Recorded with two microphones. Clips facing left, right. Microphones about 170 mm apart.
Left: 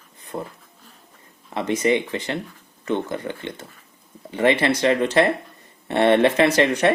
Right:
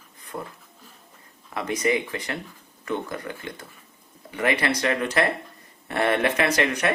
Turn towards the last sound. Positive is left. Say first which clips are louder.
# left 6 dB
turn(degrees=30)  # may be behind; listen again after turning